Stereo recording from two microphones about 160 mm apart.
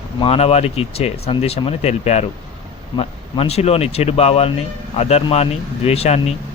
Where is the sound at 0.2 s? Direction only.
40° left (ahead or behind).